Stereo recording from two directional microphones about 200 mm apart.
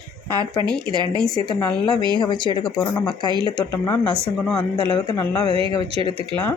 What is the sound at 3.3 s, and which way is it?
Speech, 25° right (ahead or behind).